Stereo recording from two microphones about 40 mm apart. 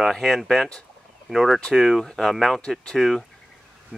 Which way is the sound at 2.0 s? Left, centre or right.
Centre.